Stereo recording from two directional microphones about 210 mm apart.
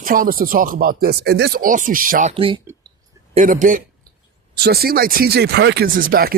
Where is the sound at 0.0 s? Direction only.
40° right (ahead or behind).